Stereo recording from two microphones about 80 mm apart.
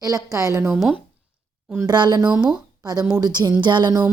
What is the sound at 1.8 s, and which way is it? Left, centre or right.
Speech, right.